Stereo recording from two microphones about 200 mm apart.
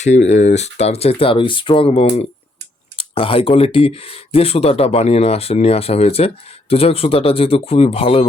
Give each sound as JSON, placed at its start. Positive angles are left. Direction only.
{"t": 0.0, "sound": "speech", "side_deg": 35}